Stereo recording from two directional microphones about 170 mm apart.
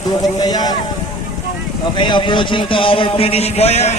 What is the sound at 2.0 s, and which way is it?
Speech, 25° left (ahead or behind).